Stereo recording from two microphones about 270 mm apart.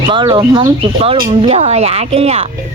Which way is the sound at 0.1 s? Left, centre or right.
Centre.